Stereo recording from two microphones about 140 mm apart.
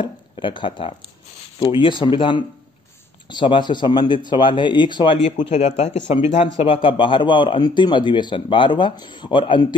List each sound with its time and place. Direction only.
0.0 s speech: 35° left (ahead or behind)
5.5 s speech: 55° left (ahead or behind)
6.4 s speech: 40° left (ahead or behind)